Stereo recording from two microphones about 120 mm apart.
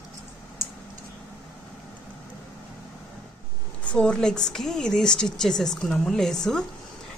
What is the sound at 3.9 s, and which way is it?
A woman's voice, 10° left (ahead or behind).